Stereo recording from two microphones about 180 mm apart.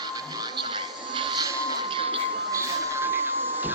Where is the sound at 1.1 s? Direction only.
25° right (ahead or behind).